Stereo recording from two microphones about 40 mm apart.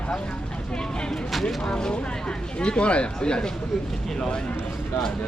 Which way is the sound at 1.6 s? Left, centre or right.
Left.